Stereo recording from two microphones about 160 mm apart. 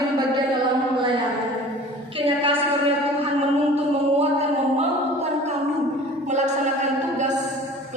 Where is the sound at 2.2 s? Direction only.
30° right (ahead or behind).